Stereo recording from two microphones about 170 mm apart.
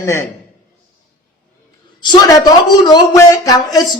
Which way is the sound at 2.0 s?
25° left (ahead or behind).